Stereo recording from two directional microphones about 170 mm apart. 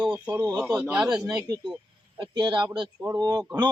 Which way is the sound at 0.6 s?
5° right (ahead or behind).